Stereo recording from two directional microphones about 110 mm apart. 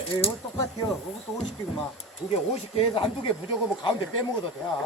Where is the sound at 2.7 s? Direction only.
55° left (ahead or behind).